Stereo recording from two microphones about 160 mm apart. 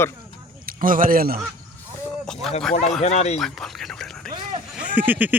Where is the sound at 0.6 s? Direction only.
60° right (ahead or behind).